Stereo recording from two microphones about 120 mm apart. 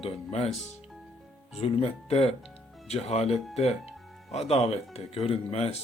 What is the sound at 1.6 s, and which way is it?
Speech, 55° left (ahead or behind).